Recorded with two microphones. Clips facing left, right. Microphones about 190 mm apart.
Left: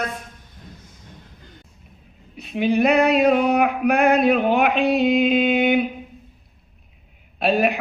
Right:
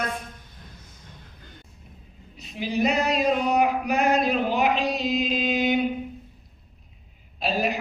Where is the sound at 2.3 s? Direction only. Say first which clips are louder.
Left 8 dB; 60° left (ahead or behind).